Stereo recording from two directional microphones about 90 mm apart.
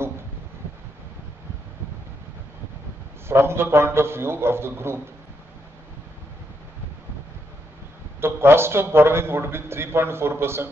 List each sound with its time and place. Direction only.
3.3 s a man's voice: 30° right (ahead or behind)
8.2 s a man's voice: 25° right (ahead or behind)